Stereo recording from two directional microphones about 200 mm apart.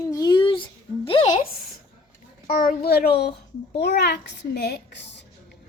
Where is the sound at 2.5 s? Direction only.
45° left (ahead or behind).